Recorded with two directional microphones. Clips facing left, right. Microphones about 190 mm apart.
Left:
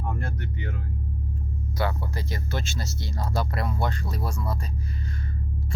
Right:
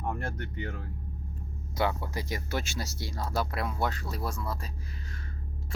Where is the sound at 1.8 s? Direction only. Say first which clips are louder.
Even; 15° right (ahead or behind).